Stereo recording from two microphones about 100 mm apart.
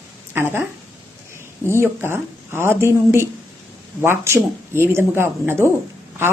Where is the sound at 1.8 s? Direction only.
25° right (ahead or behind).